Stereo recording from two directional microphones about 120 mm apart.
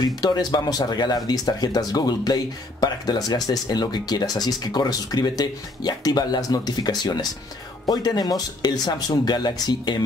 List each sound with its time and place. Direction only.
0.0 s speech: 35° left (ahead or behind)